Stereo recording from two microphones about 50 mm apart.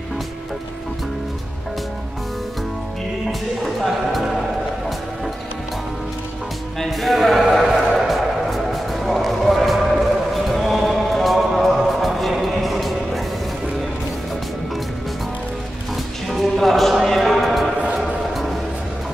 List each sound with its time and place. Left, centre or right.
3.3 s music: centre
6.8 s music: centre
16.3 s music: centre
16.9 s a sound: centre